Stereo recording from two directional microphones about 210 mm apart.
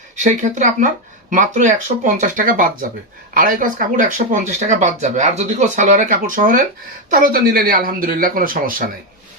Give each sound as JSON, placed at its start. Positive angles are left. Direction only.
{"t": 0.2, "sound": "speech", "side_deg": -35}